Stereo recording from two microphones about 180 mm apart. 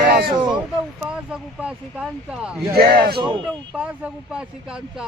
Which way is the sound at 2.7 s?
60° right (ahead or behind).